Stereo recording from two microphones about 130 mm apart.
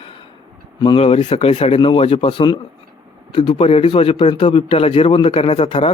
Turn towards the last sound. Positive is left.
turn(degrees=45)  # may be behind; listen again after turning